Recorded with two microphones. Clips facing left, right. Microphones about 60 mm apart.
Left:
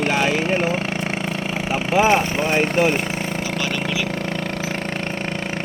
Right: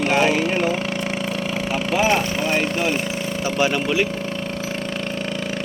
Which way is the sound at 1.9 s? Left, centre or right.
Left.